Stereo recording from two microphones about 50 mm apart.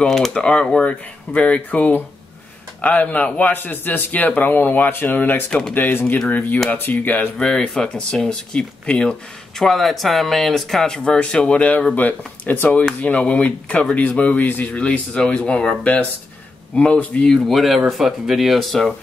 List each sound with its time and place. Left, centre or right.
0.3 s speech: centre
3.5 s speech: left
5.5 s speech: centre
5.8 s speech: left
7.2 s speech: centre
9.6 s speech: centre
11.0 s speech: left
14.7 s speech: left
15.8 s speech: left
16.7 s speech: left
17.3 s speech: centre